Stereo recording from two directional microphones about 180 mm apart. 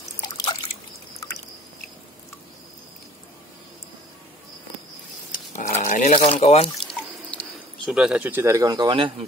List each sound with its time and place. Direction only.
5.3 s a sound: 45° left (ahead or behind)
6.1 s speech: 35° left (ahead or behind)
6.9 s drip: centre (ahead or behind); by 9.1 s 25° right (ahead or behind)